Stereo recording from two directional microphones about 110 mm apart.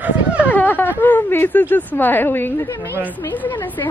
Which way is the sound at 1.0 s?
20° left (ahead or behind).